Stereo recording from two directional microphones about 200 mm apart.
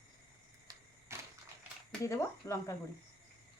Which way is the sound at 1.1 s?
15° right (ahead or behind).